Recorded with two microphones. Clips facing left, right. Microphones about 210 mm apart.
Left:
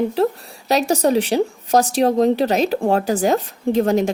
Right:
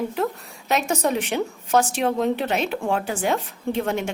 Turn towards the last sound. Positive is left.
turn(degrees=35)  # may be behind; listen again after turning